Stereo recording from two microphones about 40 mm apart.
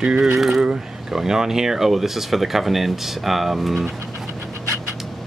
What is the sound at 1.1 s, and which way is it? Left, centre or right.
Speech, centre.